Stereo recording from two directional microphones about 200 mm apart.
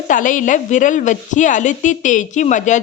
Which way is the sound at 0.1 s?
40° left (ahead or behind).